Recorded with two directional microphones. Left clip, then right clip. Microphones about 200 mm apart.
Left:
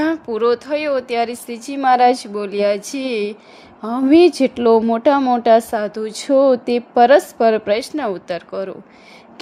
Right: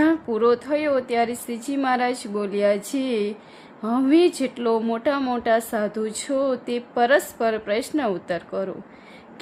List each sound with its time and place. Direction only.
0.0 s speech: 30° left (ahead or behind)